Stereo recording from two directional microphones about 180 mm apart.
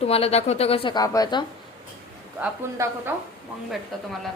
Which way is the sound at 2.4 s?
15° right (ahead or behind).